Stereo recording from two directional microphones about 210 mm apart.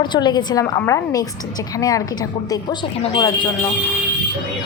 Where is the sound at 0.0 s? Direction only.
20° left (ahead or behind).